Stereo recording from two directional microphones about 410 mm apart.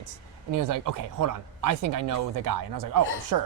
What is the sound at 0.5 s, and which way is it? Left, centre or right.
Speech, right.